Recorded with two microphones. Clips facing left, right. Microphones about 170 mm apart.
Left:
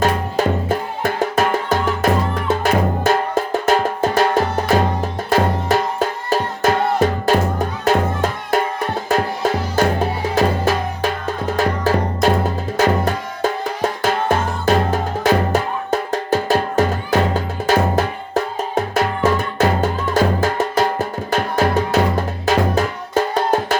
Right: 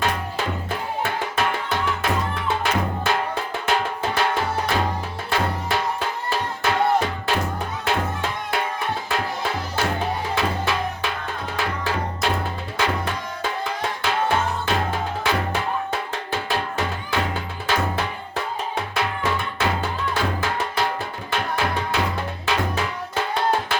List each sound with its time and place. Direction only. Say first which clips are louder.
0.0 s music: left 7 dB; 45° left (ahead or behind)